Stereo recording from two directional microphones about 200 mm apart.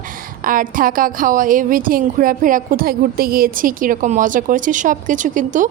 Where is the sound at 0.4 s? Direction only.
45° right (ahead or behind).